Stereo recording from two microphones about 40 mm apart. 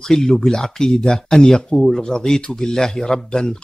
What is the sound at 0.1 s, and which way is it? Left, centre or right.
Speech, centre.